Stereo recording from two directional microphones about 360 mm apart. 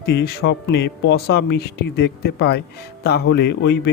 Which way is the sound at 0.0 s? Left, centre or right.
Left.